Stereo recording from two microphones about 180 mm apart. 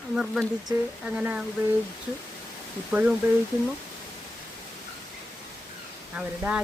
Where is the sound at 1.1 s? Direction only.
10° right (ahead or behind).